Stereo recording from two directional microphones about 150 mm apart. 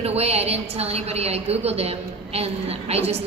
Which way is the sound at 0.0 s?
45° right (ahead or behind).